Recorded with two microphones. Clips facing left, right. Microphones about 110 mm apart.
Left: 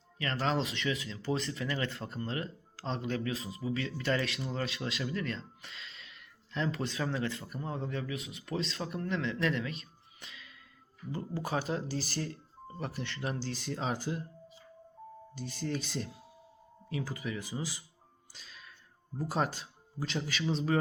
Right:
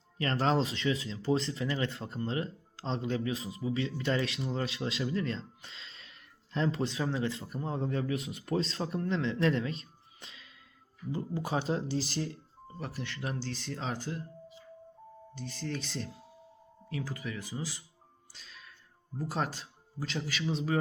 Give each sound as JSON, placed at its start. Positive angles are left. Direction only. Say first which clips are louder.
{"t": 0.2, "sound": "speech", "louder": "right 3 dB", "side_deg": -35}
{"t": 11.1, "sound": "speech", "louder": "right 1 dB", "side_deg": -20}
{"t": 12.8, "sound": "speech", "louder": "left 1 dB", "side_deg": 0}
{"t": 15.4, "sound": "speech", "louder": "left 2 dB", "side_deg": 5}
{"t": 18.3, "sound": "music", "louder": "even", "side_deg": 5}
{"t": 19.1, "sound": "speech", "louder": "left 2 dB", "side_deg": 0}